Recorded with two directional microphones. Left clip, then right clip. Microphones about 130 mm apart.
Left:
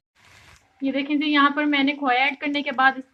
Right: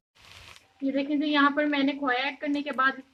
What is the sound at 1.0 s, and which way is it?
A woman's voice, 75° left (ahead or behind).